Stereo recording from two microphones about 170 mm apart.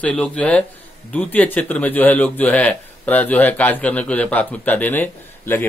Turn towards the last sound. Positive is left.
turn(degrees=10)  # may be behind; listen again after turning